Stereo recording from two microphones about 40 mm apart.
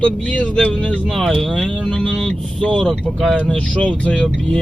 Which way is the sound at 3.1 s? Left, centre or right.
Centre.